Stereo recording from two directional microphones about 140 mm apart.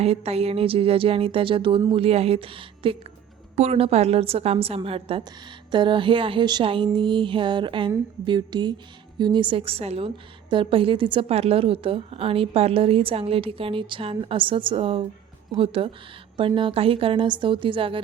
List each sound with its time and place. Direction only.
0.0 s a woman's voice: 45° right (ahead or behind)